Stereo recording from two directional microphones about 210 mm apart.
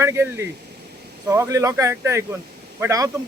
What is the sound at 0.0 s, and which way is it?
Speech, 15° right (ahead or behind).